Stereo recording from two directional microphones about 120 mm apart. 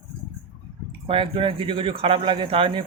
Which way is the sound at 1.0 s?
50° right (ahead or behind).